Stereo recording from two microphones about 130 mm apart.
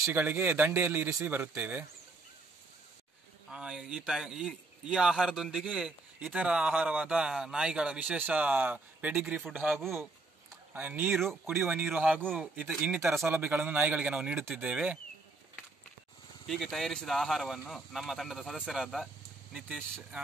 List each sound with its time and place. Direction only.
0.0 s a man's voice: 15° right (ahead or behind)
3.4 s a man's voice: 5° right (ahead or behind)
16.4 s speech: centre (ahead or behind)